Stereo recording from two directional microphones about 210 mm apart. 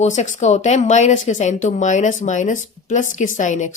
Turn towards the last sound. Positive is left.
turn(degrees=35)  # may be behind; listen again after turning